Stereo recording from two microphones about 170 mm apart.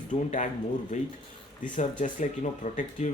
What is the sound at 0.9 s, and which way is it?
Speech, 45° left (ahead or behind).